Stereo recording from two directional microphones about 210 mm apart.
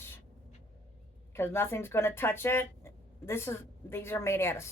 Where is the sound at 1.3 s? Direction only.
10° left (ahead or behind).